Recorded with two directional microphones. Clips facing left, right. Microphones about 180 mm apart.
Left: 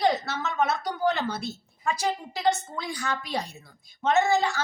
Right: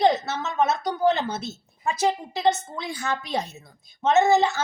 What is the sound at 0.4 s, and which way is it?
A woman's voice, 20° right (ahead or behind).